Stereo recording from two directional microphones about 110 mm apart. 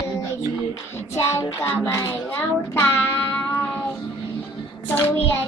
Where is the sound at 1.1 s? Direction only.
25° left (ahead or behind).